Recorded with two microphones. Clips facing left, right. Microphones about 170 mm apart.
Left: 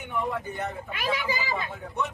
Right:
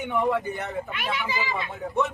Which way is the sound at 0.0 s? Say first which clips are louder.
Right 6 dB; 90° right.